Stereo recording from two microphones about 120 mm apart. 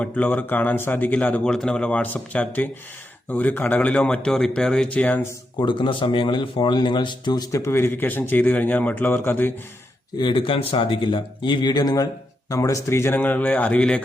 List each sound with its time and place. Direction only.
0.0 s speech: 15° left (ahead or behind)
5.5 s speech: 40° left (ahead or behind)
7.6 s speech: 20° left (ahead or behind)
10.2 s speech: 40° left (ahead or behind); by 14.0 s 10° left (ahead or behind)